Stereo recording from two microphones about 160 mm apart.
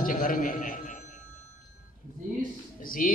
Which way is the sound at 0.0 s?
60° left (ahead or behind).